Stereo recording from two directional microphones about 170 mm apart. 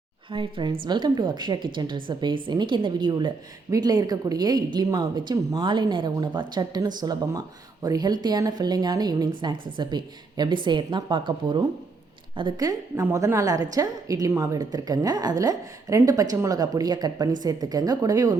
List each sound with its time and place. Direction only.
0.3 s a woman's voice: 30° right (ahead or behind)